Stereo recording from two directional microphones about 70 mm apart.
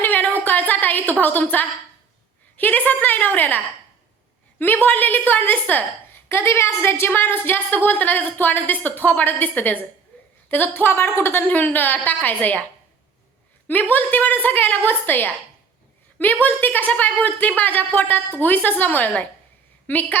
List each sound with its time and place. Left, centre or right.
0.0 s a sound: left
1.2 s a woman's voice: left
4.6 s a woman's voice: left
13.7 s a woman's voice: left